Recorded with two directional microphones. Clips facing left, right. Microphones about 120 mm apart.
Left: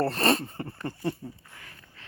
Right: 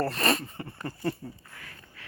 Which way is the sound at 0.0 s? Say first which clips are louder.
Left 3 dB; 30° left (ahead or behind).